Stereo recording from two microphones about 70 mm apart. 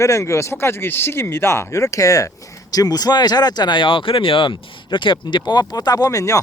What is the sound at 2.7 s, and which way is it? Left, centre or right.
Speech, left.